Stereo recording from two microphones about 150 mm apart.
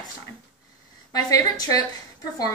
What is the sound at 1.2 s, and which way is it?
Speech, 25° left (ahead or behind).